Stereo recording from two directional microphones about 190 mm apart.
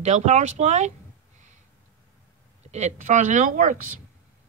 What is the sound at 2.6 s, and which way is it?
Speech, 35° right (ahead or behind).